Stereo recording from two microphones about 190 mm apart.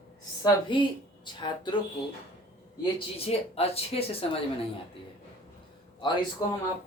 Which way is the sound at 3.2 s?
30° left (ahead or behind).